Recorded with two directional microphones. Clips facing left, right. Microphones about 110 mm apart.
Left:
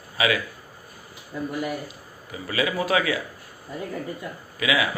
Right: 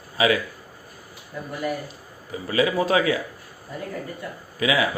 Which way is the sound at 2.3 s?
30° right (ahead or behind).